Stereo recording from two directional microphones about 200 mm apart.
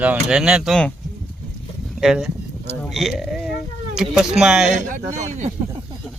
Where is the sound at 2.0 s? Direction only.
Centre (ahead or behind).